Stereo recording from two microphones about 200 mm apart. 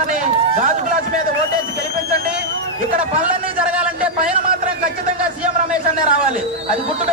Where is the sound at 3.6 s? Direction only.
5° right (ahead or behind).